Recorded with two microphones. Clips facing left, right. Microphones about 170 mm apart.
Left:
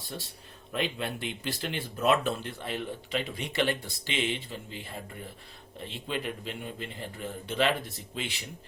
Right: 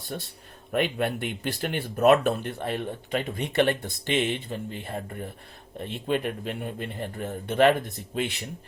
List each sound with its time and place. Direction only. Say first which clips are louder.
0.1 s speech: right 5 dB; 55° right (ahead or behind)